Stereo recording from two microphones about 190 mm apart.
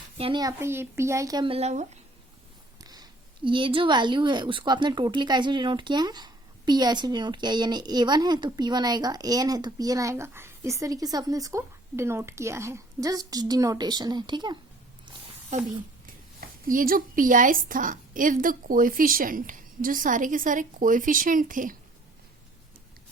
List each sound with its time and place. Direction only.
0.2 s speech: 25° right (ahead or behind)
2.8 s speech: 20° right (ahead or behind)
16.4 s a woman's voice: 50° right (ahead or behind)